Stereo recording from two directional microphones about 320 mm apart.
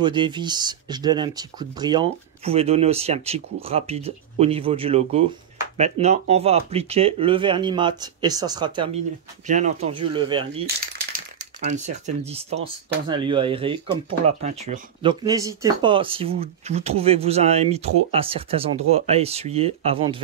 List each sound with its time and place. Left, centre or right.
0.0 s speech: centre